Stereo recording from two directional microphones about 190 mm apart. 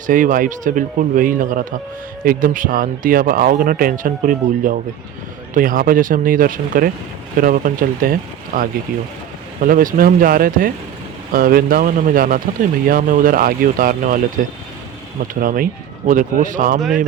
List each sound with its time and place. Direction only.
0.1 s speech: 45° right (ahead or behind)